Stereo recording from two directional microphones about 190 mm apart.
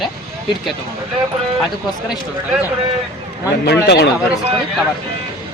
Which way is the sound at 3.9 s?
60° left (ahead or behind).